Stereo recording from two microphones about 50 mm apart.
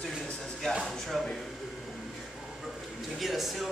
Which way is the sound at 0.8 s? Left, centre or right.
Centre.